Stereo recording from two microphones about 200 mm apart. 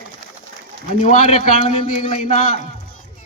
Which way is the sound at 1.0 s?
35° left (ahead or behind).